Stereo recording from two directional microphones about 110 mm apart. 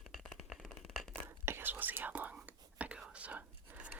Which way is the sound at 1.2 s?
20° right (ahead or behind).